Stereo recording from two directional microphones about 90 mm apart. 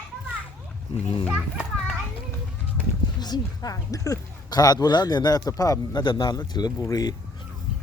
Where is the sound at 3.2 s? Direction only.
45° left (ahead or behind).